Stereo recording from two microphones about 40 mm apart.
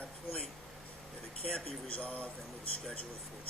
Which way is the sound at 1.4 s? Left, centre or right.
Centre.